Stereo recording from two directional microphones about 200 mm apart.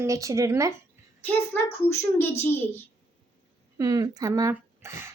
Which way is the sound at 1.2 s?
10° left (ahead or behind).